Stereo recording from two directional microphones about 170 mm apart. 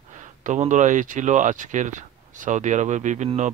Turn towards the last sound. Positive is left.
turn(degrees=-45)  # may be behind; listen again after turning